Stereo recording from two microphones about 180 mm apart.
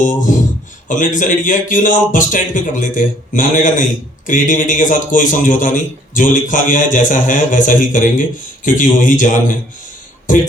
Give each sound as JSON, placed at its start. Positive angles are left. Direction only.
{"t": 0.0, "sound": "a man's voice", "side_deg": 45}